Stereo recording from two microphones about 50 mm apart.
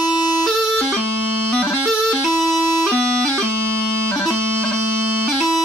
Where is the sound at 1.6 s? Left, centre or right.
Centre.